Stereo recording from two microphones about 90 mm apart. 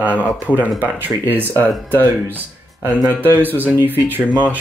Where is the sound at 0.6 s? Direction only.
20° right (ahead or behind).